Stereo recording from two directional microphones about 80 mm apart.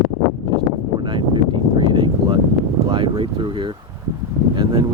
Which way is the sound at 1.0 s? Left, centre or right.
Right.